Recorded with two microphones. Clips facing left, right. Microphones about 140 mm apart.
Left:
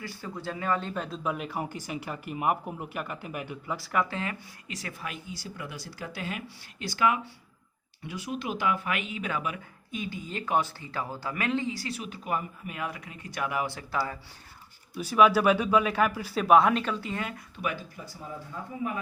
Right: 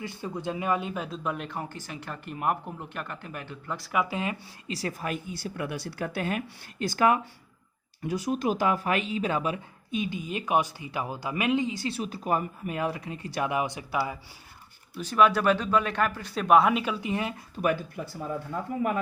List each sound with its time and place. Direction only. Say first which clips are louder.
0.0 s speech: right 4 dB; 20° right (ahead or behind); by 3.8 s 10° left (ahead or behind)
3.8 s speech: right 2 dB; 10° right (ahead or behind)
4.7 s speech: right 7 dB; 35° right (ahead or behind); by 14.2 s 15° right (ahead or behind)
14.9 s speech: left 1 dB; 5° left (ahead or behind); by 17.4 s 20° right (ahead or behind)
17.6 s speech: right 7 dB; 55° right (ahead or behind)
18.5 s speech: right 6 dB; 70° right (ahead or behind)